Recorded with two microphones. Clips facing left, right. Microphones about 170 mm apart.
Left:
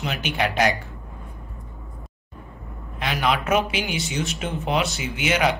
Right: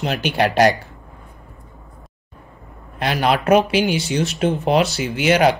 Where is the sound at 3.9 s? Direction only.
Centre (ahead or behind).